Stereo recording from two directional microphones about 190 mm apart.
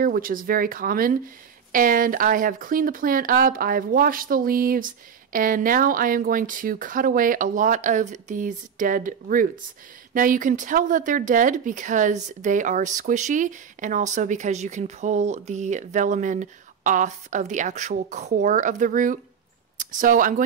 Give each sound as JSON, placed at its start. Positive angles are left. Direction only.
{"t": 0.0, "sound": "speech", "side_deg": -45}